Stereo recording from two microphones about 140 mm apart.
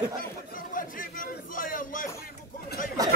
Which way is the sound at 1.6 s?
75° left (ahead or behind).